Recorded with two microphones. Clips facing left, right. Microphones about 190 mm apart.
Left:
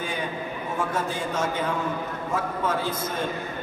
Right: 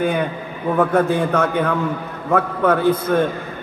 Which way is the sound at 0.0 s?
60° right (ahead or behind).